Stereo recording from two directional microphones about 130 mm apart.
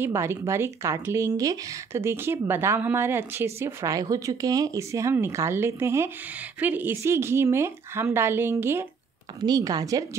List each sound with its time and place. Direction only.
0.0 s speech: 20° right (ahead or behind)
9.4 s speech: 30° right (ahead or behind)